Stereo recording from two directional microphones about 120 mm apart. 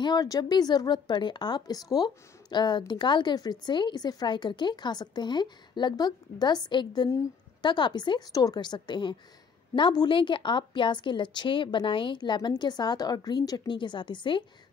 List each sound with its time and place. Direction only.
0.0 s a woman's voice: 35° left (ahead or behind)